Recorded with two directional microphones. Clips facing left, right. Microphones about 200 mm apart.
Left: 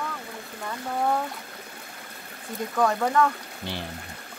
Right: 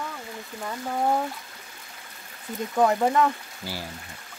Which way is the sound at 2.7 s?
20° right (ahead or behind).